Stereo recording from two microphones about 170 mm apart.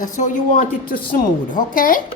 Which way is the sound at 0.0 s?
50° left (ahead or behind).